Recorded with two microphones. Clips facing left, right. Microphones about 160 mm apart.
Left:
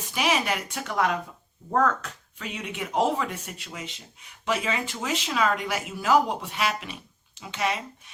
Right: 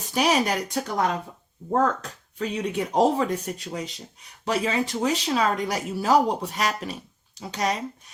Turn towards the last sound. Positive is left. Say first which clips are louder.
# right 2 dB
turn(degrees=-40)  # may be behind; listen again after turning